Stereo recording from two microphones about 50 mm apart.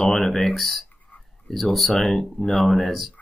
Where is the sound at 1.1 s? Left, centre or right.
Left.